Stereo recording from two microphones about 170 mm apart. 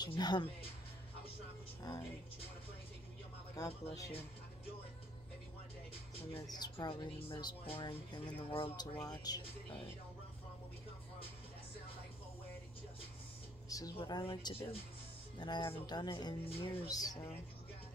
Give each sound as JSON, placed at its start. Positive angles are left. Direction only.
{"t": 0.0, "sound": "speech", "side_deg": 25}
{"t": 3.5, "sound": "speech", "side_deg": 20}
{"t": 6.5, "sound": "speech", "side_deg": 25}
{"t": 13.7, "sound": "a sound", "side_deg": 20}
{"t": 13.9, "sound": "speech", "side_deg": 25}